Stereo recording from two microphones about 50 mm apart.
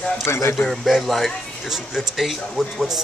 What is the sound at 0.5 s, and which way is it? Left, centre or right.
Speech, centre.